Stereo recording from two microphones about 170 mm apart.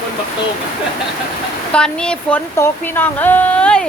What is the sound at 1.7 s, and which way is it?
Speech, 5° left (ahead or behind).